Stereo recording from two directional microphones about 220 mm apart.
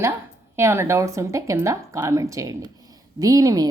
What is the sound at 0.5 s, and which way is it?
A woman's voice, 10° right (ahead or behind).